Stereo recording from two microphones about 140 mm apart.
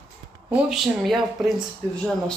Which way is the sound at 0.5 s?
Centre (ahead or behind).